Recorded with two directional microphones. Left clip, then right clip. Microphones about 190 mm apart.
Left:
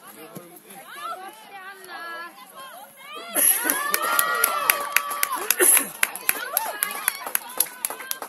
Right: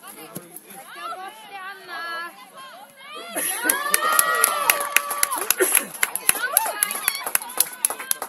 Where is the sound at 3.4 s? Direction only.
25° right (ahead or behind).